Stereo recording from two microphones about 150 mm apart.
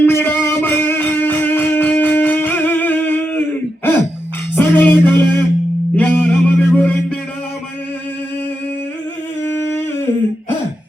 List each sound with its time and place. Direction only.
0.0 s music: 15° left (ahead or behind)
4.5 s music: 10° left (ahead or behind)
6.0 s a sound: 10° left (ahead or behind)
9.4 s humming: 15° left (ahead or behind)